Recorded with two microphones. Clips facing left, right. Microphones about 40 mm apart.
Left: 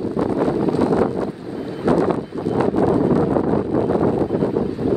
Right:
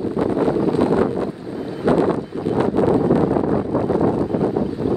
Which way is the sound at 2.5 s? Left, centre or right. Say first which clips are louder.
Even; right.